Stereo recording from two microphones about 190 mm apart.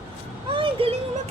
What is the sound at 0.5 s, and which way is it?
Speech, 30° right (ahead or behind).